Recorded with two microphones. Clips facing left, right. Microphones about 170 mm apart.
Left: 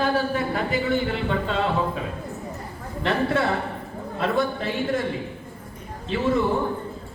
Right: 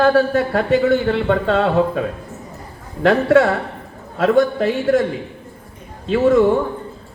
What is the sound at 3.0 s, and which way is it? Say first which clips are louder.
A man's voice: right 10 dB; 90° right.